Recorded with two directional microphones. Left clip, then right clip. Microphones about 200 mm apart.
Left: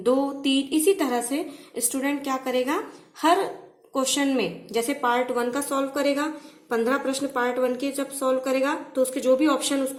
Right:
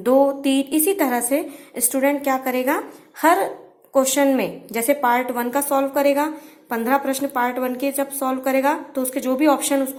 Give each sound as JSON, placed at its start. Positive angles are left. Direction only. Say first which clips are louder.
{"t": 0.0, "sound": "a woman's voice", "louder": "right 6 dB", "side_deg": -20}